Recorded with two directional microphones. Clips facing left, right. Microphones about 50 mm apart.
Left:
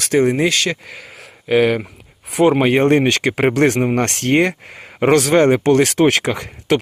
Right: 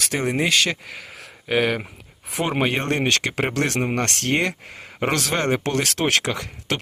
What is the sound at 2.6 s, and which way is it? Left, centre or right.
Speech, centre.